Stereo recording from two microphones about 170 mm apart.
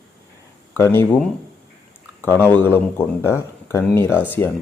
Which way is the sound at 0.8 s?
15° left (ahead or behind).